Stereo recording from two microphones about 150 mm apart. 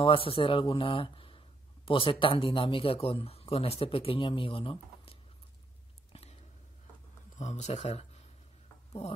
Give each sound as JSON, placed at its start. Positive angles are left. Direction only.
{"t": 0.0, "sound": "speech", "side_deg": 35}
{"t": 6.1, "sound": "whispering", "side_deg": 45}
{"t": 7.3, "sound": "speech", "side_deg": 50}